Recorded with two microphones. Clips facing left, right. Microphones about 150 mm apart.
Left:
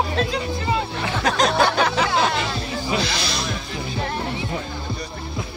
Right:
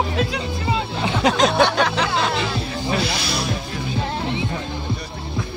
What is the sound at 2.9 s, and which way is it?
Music, 5° right (ahead or behind).